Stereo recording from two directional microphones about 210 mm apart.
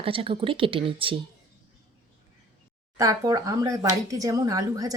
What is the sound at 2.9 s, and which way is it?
Speech, 15° right (ahead or behind).